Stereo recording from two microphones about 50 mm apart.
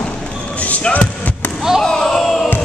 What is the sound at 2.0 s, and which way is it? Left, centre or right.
Crowd, centre.